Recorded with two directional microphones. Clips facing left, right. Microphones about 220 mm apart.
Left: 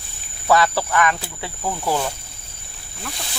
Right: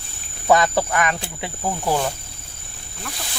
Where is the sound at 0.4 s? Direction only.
20° right (ahead or behind).